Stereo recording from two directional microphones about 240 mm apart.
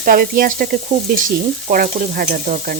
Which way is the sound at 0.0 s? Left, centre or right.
Right.